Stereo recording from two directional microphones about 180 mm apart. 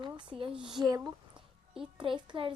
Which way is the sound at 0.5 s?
5° right (ahead or behind).